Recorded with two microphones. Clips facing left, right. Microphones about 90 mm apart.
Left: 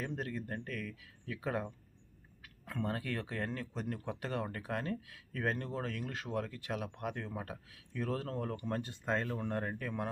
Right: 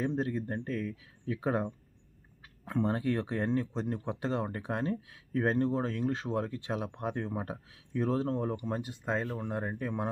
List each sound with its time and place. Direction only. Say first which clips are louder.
0.0 s speech: right 8 dB; 25° right (ahead or behind)